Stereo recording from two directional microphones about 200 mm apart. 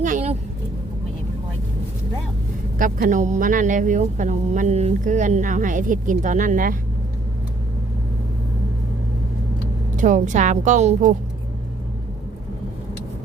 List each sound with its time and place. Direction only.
0.0 s vehicle: 35° right (ahead or behind)
2.7 s speech: 40° right (ahead or behind)
10.0 s speech: 40° right (ahead or behind)